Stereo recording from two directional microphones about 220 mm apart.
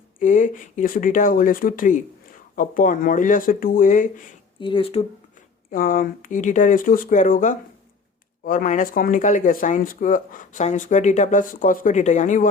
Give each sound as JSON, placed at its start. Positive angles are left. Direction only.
{"t": 0.2, "sound": "speech", "side_deg": 35}
{"t": 4.6, "sound": "speech", "side_deg": 25}
{"t": 5.7, "sound": "speech", "side_deg": 40}